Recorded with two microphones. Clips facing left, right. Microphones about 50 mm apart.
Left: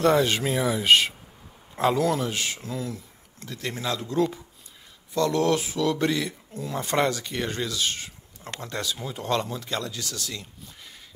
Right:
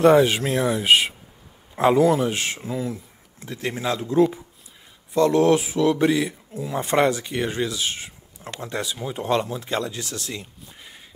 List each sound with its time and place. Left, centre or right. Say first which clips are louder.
0.1 s speech: right 5 dB; centre
1.8 s speech: right 6 dB; centre
2.3 s speech: right 3 dB; right
2.6 s a sound: right 4 dB; centre
3.4 s speech: right 4 dB; right
6.8 s speech: right 5 dB; right
10.4 s a sound: right 2 dB; right